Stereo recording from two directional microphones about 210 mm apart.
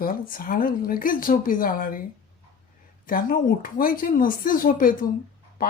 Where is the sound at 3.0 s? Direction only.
40° left (ahead or behind).